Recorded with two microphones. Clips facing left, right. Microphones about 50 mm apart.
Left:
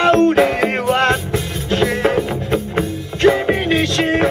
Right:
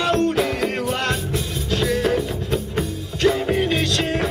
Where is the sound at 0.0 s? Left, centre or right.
Left.